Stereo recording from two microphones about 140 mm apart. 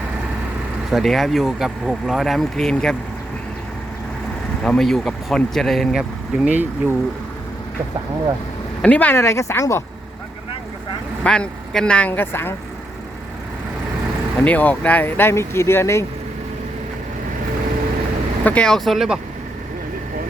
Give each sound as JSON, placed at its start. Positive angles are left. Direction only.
{"t": 0.9, "sound": "speech", "side_deg": 0}
{"t": 4.6, "sound": "speech", "side_deg": 5}
{"t": 8.8, "sound": "speech", "side_deg": 10}
{"t": 11.2, "sound": "speech", "side_deg": 5}
{"t": 14.4, "sound": "speech", "side_deg": 10}
{"t": 18.4, "sound": "speech", "side_deg": 10}